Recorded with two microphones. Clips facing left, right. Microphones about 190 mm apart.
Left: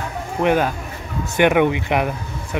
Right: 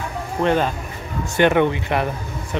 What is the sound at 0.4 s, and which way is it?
Speech, 10° left (ahead or behind).